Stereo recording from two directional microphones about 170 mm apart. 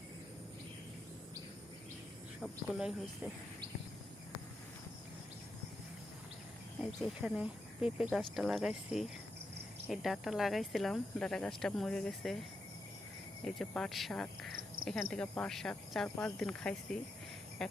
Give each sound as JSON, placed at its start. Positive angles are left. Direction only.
{"t": 2.4, "sound": "speech", "side_deg": 0}
{"t": 7.0, "sound": "speech", "side_deg": -5}
{"t": 13.4, "sound": "speech", "side_deg": 5}
{"t": 14.8, "sound": "cricket", "side_deg": -55}
{"t": 15.1, "sound": "speech", "side_deg": 5}